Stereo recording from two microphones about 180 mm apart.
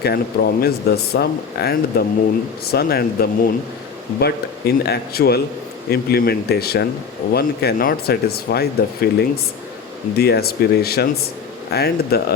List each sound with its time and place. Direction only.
0.0 s speech: 60° left (ahead or behind)